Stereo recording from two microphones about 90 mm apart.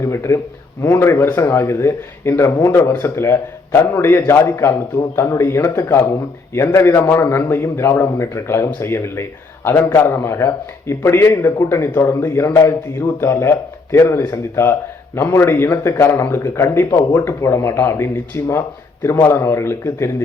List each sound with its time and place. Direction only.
0.0 s a man's voice: 30° left (ahead or behind)